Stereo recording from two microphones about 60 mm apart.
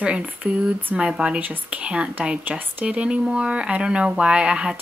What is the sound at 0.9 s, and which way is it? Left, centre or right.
Speech, centre.